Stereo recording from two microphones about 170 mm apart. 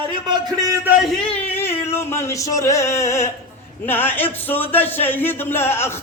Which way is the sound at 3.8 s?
10° left (ahead or behind).